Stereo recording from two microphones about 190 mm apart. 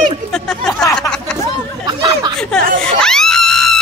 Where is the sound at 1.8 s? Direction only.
20° right (ahead or behind).